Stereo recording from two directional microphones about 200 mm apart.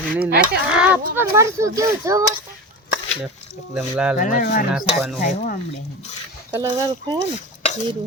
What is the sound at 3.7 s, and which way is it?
Speech, 5° right (ahead or behind).